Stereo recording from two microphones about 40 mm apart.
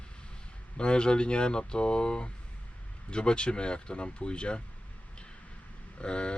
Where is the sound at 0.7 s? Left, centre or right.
Left.